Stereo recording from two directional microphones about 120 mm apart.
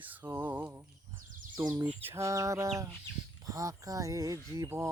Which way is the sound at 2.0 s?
20° right (ahead or behind).